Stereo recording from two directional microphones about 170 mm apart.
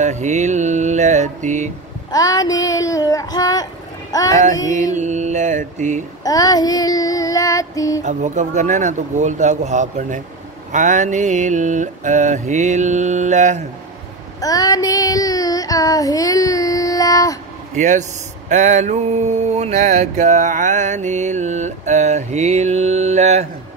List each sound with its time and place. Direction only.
0.0 s mantra: 45° right (ahead or behind)
2.0 s child singing: 20° left (ahead or behind)
4.1 s speech: 20° left (ahead or behind)
4.9 s mantra: 45° right (ahead or behind)
6.2 s child singing: 20° left (ahead or behind)
8.0 s mantra: 45° right (ahead or behind)
14.4 s child singing: 20° left (ahead or behind)
17.7 s mantra: 45° right (ahead or behind)